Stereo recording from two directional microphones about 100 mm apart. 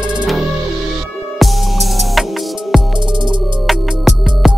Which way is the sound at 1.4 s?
Centre (ahead or behind).